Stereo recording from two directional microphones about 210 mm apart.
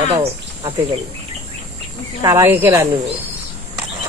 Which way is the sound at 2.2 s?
15° right (ahead or behind).